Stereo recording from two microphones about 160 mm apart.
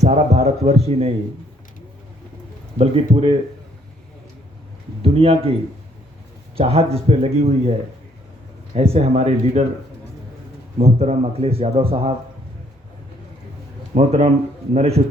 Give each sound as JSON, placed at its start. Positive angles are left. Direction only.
{"t": 0.0, "sound": "a man's voice", "side_deg": -45}
{"t": 2.7, "sound": "a man's voice", "side_deg": -40}
{"t": 5.0, "sound": "a man's voice", "side_deg": -35}
{"t": 6.6, "sound": "a man's voice", "side_deg": -40}
{"t": 8.7, "sound": "a man's voice", "side_deg": -40}
{"t": 10.8, "sound": "a man's voice", "side_deg": -40}
{"t": 13.9, "sound": "a man's voice", "side_deg": -40}